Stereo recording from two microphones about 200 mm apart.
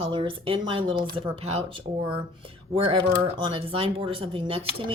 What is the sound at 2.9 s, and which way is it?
A woman's voice, 25° right (ahead or behind).